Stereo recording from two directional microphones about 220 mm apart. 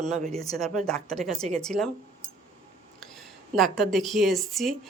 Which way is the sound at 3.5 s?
Centre (ahead or behind).